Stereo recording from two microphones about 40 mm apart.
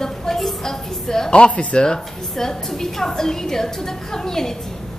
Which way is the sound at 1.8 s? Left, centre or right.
Centre.